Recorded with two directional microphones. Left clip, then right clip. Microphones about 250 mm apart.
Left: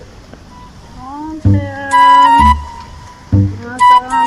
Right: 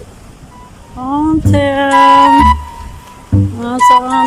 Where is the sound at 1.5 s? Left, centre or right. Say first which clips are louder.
Right 10 dB; right.